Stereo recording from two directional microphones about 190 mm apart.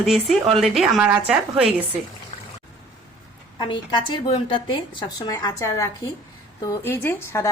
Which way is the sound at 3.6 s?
25° left (ahead or behind).